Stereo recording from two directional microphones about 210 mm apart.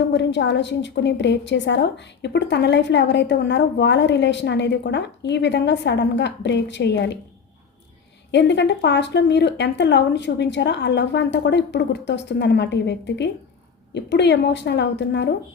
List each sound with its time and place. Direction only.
0.1 s speech: 55° left (ahead or behind)
8.3 s speech: 55° left (ahead or behind)